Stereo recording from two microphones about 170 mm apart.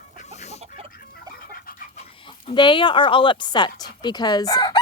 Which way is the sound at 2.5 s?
30° left (ahead or behind).